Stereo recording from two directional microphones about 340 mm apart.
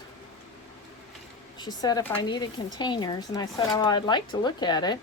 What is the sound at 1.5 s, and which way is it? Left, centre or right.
Speech, centre.